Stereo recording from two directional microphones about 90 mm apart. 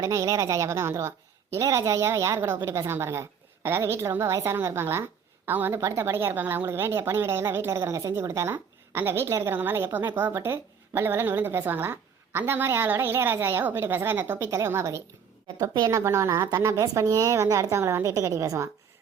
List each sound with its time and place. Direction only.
0.0 s a woman's voice: 35° right (ahead or behind)
15.5 s a woman's voice: 45° right (ahead or behind)